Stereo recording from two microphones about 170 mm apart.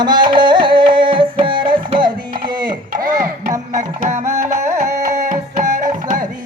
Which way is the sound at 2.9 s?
55° right (ahead or behind).